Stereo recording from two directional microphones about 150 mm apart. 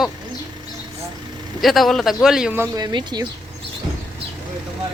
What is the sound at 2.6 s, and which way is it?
Speech, 25° right (ahead or behind).